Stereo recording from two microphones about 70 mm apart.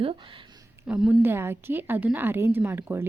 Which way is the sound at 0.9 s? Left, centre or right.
Centre.